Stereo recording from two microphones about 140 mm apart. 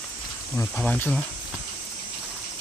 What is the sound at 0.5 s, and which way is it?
Speech, 10° left (ahead or behind).